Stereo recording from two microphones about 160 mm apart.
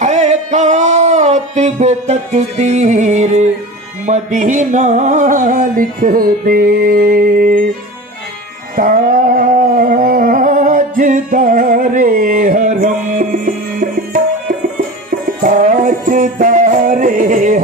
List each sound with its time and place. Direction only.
0.0 s music: 45° right (ahead or behind)
8.7 s a sound: 60° right (ahead or behind)
15.4 s music: 55° right (ahead or behind)